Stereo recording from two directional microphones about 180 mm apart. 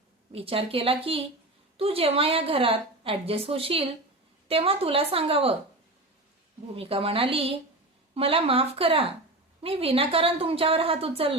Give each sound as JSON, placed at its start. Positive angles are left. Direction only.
{"t": 0.3, "sound": "a woman's voice", "side_deg": -30}
{"t": 6.7, "sound": "a woman's voice", "side_deg": -30}